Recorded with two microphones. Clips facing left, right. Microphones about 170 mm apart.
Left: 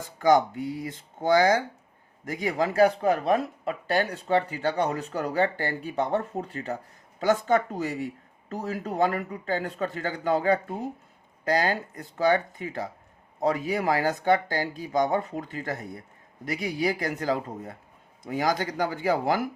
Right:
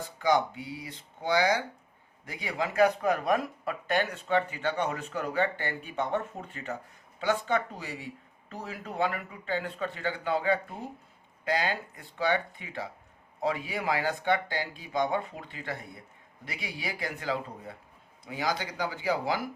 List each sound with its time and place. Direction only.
0.2 s speech: 45° left (ahead or behind)